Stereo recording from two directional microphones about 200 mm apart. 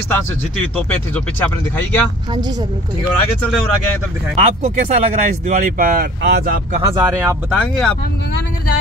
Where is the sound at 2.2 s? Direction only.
20° right (ahead or behind).